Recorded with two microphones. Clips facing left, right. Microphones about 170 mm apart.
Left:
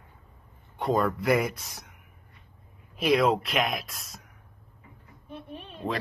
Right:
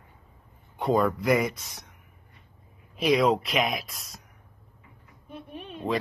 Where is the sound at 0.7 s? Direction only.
Centre (ahead or behind).